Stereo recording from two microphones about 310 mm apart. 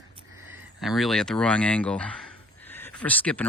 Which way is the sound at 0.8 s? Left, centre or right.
Centre.